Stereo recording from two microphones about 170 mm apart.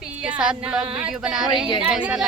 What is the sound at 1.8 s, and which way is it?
Speech, 5° right (ahead or behind).